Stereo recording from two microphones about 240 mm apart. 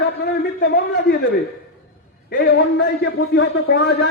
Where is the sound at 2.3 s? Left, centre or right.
Left.